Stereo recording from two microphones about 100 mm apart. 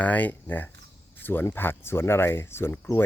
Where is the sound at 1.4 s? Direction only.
20° left (ahead or behind).